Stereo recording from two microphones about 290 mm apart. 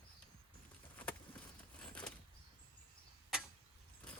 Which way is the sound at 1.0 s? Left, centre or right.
Centre.